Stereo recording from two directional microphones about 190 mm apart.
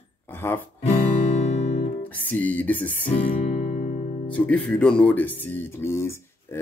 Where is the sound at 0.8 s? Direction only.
35° left (ahead or behind).